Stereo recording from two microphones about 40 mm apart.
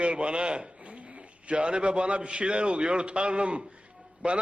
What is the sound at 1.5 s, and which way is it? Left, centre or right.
A man's voice, right.